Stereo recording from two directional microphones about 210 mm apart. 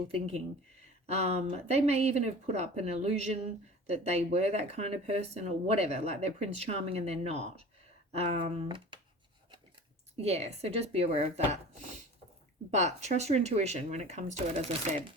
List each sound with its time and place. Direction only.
1.0 s speech: 30° right (ahead or behind)
10.2 s speech: 30° right (ahead or behind)